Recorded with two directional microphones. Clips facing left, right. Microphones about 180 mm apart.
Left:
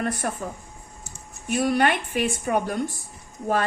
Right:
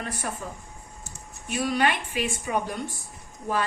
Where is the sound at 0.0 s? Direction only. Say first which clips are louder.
Left 7 dB; 55° left (ahead or behind).